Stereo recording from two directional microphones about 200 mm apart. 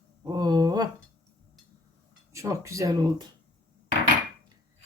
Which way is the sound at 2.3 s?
15° right (ahead or behind).